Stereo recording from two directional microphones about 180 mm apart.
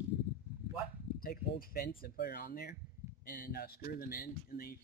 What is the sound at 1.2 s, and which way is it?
Speech, 55° left (ahead or behind).